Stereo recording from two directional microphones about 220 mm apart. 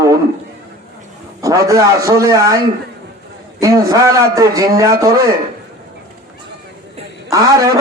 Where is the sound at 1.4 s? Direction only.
15° right (ahead or behind).